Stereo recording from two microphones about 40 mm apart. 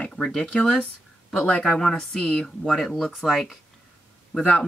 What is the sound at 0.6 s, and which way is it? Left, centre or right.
Speech, left.